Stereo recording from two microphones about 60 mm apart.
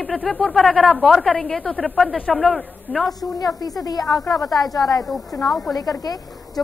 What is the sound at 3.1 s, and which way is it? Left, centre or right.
A woman's voice, left.